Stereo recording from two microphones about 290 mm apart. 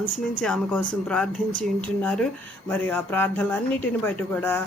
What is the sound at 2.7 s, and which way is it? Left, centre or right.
A woman's voice, centre.